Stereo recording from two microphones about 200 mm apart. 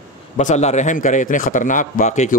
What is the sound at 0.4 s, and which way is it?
Speech, 35° left (ahead or behind).